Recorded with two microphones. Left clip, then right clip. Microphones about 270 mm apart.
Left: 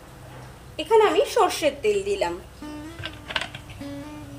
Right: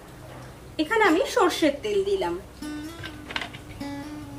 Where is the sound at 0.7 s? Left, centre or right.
Left.